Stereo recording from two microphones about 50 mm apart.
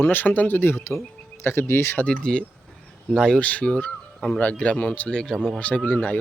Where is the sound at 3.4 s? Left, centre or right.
Left.